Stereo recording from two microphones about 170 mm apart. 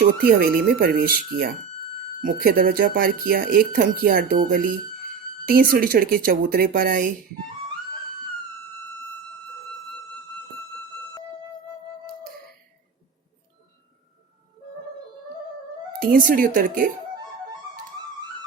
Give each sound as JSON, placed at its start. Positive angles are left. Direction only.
{"t": 0.2, "sound": "speech", "side_deg": -60}
{"t": 16.0, "sound": "speech", "side_deg": -55}